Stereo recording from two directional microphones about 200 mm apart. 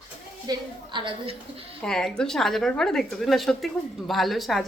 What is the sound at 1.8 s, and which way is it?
A woman's voice, centre (ahead or behind).